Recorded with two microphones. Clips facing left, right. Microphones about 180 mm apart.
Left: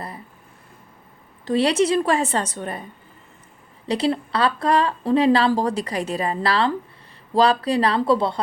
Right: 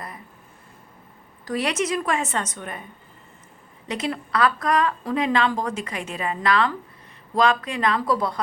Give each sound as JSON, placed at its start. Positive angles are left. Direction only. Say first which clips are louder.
{"t": 1.5, "sound": "a woman's voice", "louder": "left 6 dB", "side_deg": 30}
{"t": 3.8, "sound": "a woman's voice", "louder": "left 6 dB", "side_deg": 30}